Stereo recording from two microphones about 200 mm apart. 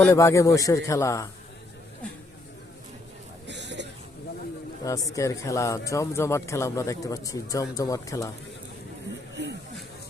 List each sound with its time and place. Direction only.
0.1 s speech: 15° left (ahead or behind)
3.4 s a sound: 60° right (ahead or behind)
4.8 s speech: 15° left (ahead or behind)